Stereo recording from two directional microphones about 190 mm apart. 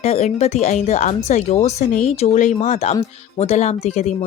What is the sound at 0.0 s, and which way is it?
Speech, 35° left (ahead or behind).